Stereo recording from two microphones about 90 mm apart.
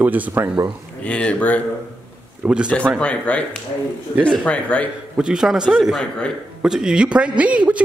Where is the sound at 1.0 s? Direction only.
15° left (ahead or behind).